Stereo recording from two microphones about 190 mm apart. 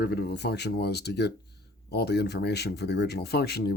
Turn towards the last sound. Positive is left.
turn(degrees=60)  # may be behind; listen again after turning